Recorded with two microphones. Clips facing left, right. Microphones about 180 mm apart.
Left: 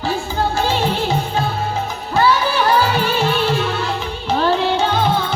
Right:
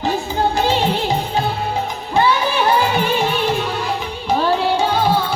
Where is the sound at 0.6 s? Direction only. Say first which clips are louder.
Right 1 dB; 15° right (ahead or behind).